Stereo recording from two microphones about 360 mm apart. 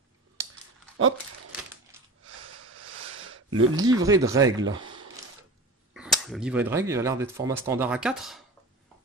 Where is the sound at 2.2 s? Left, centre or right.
Right.